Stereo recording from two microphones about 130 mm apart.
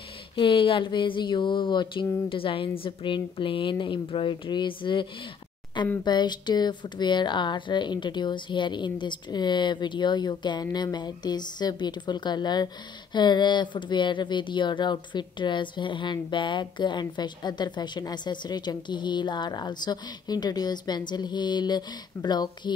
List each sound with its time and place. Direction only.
0.4 s speech: 40° left (ahead or behind)
6.0 s speech: 35° left (ahead or behind)